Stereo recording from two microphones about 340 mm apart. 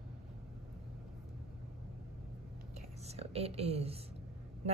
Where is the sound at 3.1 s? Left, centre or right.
Centre.